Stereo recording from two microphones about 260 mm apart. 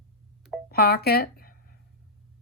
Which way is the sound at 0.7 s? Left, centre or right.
Left.